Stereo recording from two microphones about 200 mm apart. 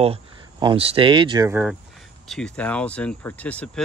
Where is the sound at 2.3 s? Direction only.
5° left (ahead or behind).